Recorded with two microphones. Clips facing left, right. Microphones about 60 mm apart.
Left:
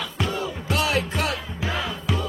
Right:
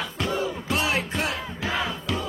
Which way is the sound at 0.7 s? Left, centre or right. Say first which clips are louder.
Left 4 dB; right.